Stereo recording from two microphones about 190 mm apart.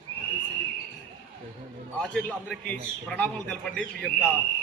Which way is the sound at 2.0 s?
Centre (ahead or behind).